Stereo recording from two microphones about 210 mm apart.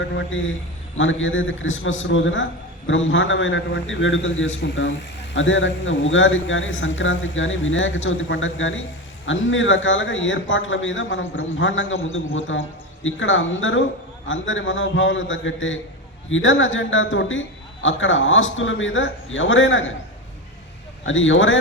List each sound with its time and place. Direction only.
0.2 s a man's voice: 65° left (ahead or behind)
21.0 s a man's voice: 65° left (ahead or behind)